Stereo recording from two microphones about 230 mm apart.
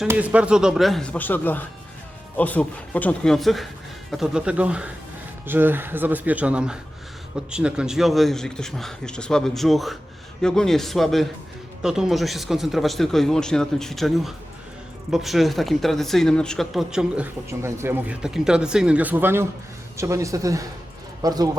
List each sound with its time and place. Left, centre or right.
0.0 s speech: centre